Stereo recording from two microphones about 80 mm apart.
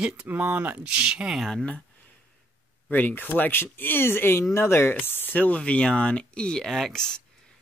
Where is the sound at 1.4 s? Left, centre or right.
Centre.